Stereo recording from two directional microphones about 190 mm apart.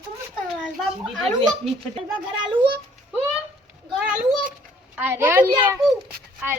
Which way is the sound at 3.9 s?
5° right (ahead or behind).